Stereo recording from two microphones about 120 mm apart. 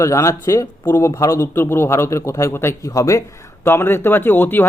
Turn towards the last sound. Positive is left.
turn(degrees=15)  # may be behind; listen again after turning